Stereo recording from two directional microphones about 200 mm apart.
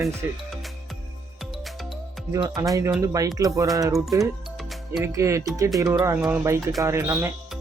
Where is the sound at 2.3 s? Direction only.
15° right (ahead or behind).